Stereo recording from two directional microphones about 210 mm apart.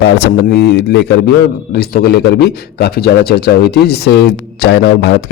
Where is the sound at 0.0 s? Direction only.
50° left (ahead or behind).